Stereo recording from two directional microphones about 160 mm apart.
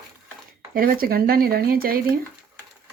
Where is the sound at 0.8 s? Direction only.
65° right (ahead or behind).